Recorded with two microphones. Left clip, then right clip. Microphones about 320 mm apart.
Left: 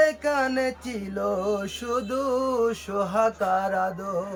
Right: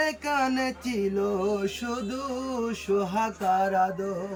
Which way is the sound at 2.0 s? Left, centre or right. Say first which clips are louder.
Left 7 dB; centre.